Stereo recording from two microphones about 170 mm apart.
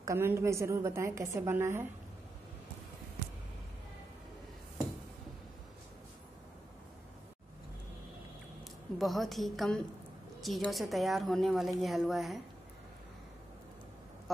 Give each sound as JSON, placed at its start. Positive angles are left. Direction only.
{"t": 0.0, "sound": "a woman's voice", "side_deg": -15}
{"t": 8.9, "sound": "a woman's voice", "side_deg": 0}